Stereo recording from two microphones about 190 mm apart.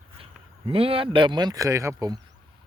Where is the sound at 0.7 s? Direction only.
30° right (ahead or behind).